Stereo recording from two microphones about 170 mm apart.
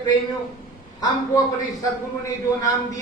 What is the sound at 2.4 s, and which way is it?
Speech, 20° left (ahead or behind).